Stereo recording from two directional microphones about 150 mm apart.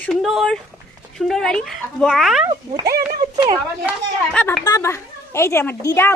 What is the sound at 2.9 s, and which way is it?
Speech, 85° right.